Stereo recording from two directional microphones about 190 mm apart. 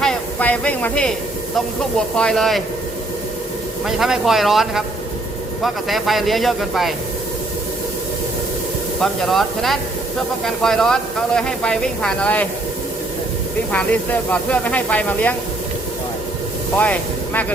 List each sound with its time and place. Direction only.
0.0 s a sound: 5° left (ahead or behind)
1.5 s speech: centre (ahead or behind)
3.8 s speech: centre (ahead or behind)
9.0 s speech: centre (ahead or behind)
13.7 s speech: 10° left (ahead or behind)
16.7 s speech: 10° left (ahead or behind)